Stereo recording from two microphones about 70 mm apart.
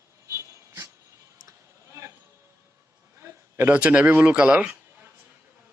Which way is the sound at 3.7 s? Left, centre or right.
Centre.